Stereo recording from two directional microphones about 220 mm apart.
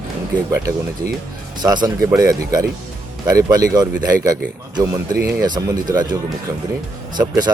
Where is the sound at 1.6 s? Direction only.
20° right (ahead or behind).